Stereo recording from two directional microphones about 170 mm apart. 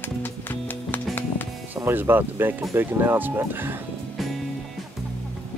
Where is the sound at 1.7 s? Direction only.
10° right (ahead or behind).